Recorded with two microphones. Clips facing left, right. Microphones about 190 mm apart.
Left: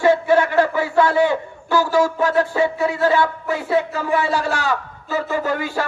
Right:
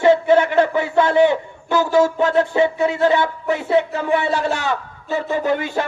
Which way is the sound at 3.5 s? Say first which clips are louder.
Right 5 dB; 20° right (ahead or behind).